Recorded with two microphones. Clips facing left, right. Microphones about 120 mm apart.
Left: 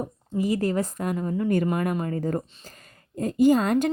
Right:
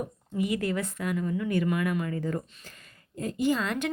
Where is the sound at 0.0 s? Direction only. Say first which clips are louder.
Left 3 dB; 35° left (ahead or behind).